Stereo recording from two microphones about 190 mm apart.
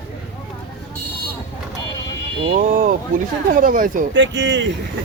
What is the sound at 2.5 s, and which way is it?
Speech, 40° right (ahead or behind).